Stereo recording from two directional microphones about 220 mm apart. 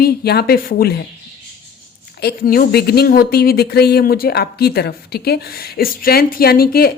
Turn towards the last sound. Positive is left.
turn(degrees=45)  # may be behind; listen again after turning